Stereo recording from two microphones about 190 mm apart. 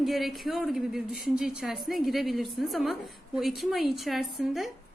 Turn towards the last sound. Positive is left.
turn(degrees=0)  # may be behind; listen again after turning